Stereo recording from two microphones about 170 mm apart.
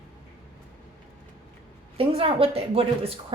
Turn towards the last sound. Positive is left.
turn(degrees=-35)  # may be behind; listen again after turning